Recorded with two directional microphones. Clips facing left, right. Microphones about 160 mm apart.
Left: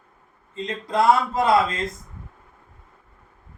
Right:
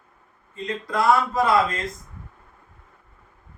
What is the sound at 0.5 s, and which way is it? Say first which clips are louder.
Speech: left 2 dB; 25° left (ahead or behind).